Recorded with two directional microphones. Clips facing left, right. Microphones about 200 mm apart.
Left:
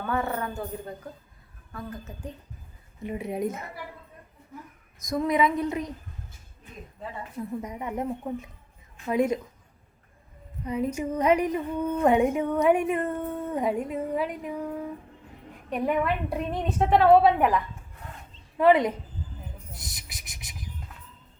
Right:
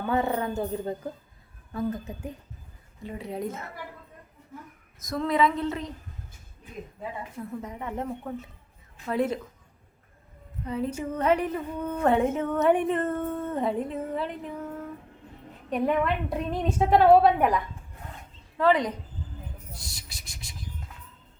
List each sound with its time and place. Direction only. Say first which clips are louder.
0.1 s speech: right 3 dB; 20° right (ahead or behind)
3.0 s speech: left 4 dB; 20° left (ahead or behind)
5.0 s a woman's voice: left 1 dB; 15° left (ahead or behind)
7.6 s a woman's voice: left 2 dB; 15° left (ahead or behind)
10.7 s a woman's voice: left 2 dB; 10° left (ahead or behind)
18.5 s speech: left 3 dB; 20° left (ahead or behind)